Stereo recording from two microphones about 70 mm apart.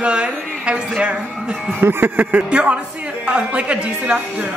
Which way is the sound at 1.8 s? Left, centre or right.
Right.